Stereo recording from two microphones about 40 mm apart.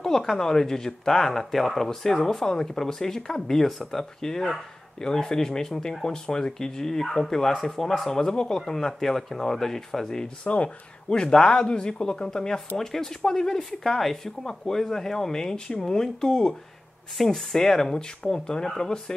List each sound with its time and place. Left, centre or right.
0.0 s a sound: centre
0.4 s speech: centre
8.1 s speech: centre
10.4 s speech: left
11.2 s speech: centre